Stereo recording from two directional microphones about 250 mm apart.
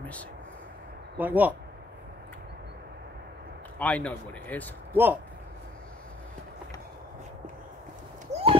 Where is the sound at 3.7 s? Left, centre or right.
Centre.